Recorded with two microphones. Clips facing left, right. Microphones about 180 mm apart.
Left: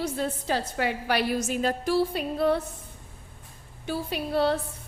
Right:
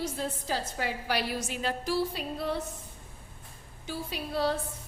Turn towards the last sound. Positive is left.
turn(degrees=60)  # may be behind; listen again after turning